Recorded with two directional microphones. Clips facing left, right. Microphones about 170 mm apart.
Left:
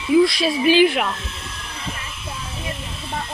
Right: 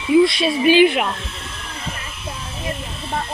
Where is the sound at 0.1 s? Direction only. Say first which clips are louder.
Right 1 dB; centre (ahead or behind).